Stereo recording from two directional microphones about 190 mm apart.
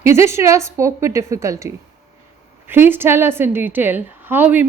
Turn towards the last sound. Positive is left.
turn(degrees=-10)  # may be behind; listen again after turning